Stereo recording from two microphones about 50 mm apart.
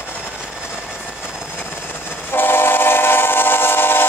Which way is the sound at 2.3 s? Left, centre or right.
Left.